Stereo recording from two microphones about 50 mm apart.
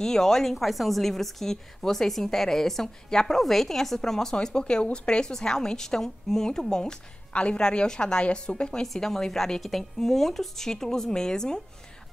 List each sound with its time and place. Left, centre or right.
0.0 s a woman's voice: centre
8.8 s a woman's voice: centre